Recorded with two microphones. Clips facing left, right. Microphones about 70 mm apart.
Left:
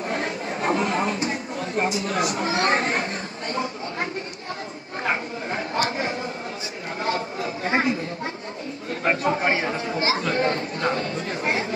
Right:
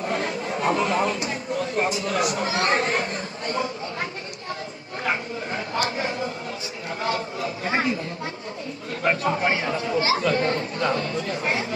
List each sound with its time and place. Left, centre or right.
0.1 s chatter: left
2.0 s speech: left
7.1 s speech: left
9.0 s speech: left